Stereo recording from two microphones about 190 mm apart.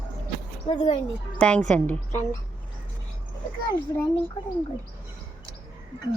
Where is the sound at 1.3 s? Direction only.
5° left (ahead or behind).